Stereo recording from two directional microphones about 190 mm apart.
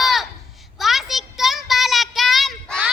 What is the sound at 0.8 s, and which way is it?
Child singing, centre (ahead or behind).